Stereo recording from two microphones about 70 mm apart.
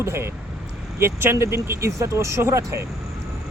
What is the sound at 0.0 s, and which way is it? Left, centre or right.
Speech, right.